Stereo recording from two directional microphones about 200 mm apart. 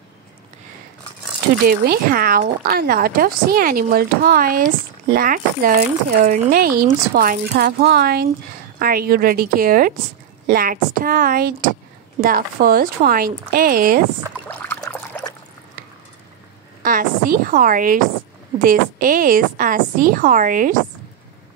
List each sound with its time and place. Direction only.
1.6 s speech: 45° right (ahead or behind)
14.5 s trickle: 10° left (ahead or behind)
16.8 s speech: 45° right (ahead or behind)